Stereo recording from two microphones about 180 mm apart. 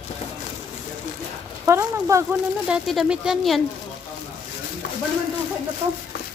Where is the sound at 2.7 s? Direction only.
5° right (ahead or behind).